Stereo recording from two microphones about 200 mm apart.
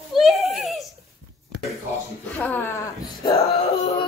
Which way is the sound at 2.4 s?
10° left (ahead or behind).